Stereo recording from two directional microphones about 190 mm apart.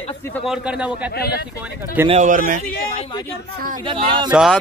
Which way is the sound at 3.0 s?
25° left (ahead or behind).